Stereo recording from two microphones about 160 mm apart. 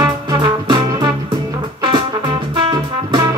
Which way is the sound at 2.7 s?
25° right (ahead or behind).